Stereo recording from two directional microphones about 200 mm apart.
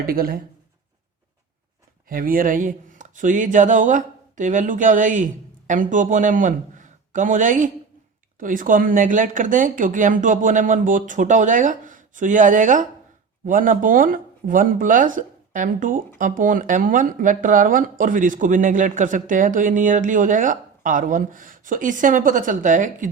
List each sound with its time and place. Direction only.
0.0 s speech: 45° right (ahead or behind)
2.0 s speech: 45° right (ahead or behind)